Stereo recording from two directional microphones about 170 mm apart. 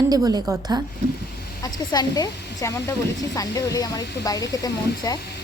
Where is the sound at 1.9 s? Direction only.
25° left (ahead or behind).